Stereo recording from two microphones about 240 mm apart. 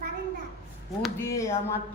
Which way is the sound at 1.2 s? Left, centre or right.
Centre.